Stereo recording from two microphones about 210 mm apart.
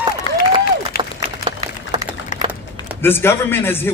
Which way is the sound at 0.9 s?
45° left (ahead or behind).